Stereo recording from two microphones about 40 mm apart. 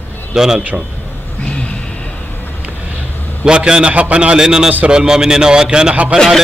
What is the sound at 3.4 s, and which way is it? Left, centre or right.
Speech, right.